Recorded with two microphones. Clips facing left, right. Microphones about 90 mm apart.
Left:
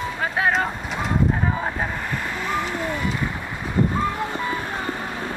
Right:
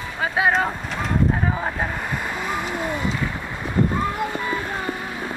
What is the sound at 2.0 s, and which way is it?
Vehicle, 15° right (ahead or behind).